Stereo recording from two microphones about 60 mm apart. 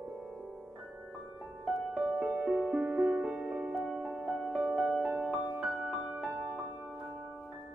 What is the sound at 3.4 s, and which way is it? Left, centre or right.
Music, right.